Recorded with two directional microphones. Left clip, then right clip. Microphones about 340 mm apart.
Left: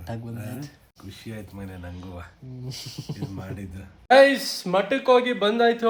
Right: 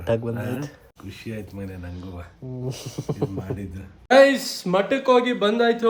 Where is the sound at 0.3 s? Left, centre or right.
Right.